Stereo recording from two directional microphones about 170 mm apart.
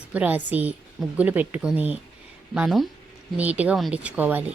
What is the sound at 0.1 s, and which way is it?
Speech, 10° right (ahead or behind).